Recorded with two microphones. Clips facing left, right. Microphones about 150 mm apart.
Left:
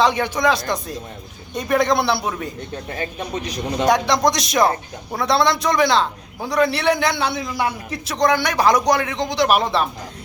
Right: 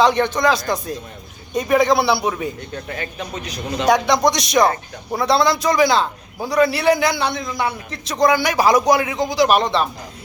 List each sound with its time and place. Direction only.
0.0 s a man's voice: 5° left (ahead or behind)
2.9 s speech: 30° left (ahead or behind)
3.8 s a man's voice: centre (ahead or behind)
8.1 s a man's voice: 5° right (ahead or behind)